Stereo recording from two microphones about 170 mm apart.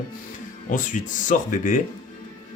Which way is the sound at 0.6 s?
50° left (ahead or behind).